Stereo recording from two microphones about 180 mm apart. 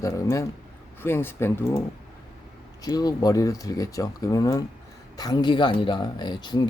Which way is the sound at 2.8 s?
20° left (ahead or behind).